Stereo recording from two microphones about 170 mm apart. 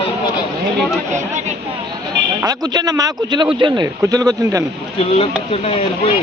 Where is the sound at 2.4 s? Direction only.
20° right (ahead or behind).